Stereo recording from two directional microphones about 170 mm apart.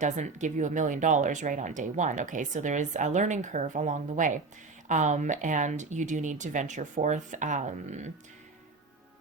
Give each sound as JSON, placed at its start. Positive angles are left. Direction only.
{"t": 0.0, "sound": "speech", "side_deg": -45}